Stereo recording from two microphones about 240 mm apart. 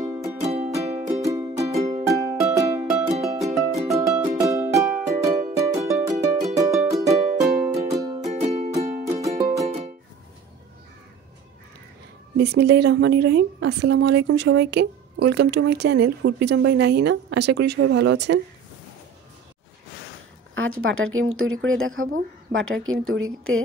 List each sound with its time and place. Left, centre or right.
0.4 s music: right
1.2 s music: centre
1.8 s music: right
2.0 s music: centre
8.3 s music: right
9.4 s music: centre
12.4 s speech: right
20.5 s speech: right